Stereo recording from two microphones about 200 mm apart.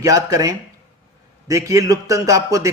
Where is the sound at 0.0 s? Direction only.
15° right (ahead or behind).